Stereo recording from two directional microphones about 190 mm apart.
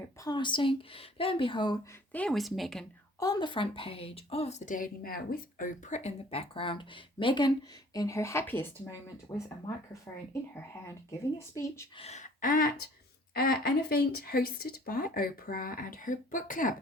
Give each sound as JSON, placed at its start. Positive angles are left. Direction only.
{"t": 0.2, "sound": "a woman's voice", "side_deg": 20}
{"t": 3.2, "sound": "a woman's voice", "side_deg": 20}
{"t": 11.3, "sound": "speech", "side_deg": 15}
{"t": 11.9, "sound": "speech", "side_deg": 35}